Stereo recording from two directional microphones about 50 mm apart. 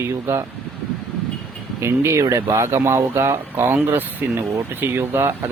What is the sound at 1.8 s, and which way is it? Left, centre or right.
Speech, right.